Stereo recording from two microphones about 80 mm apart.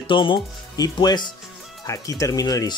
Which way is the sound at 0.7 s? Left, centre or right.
Left.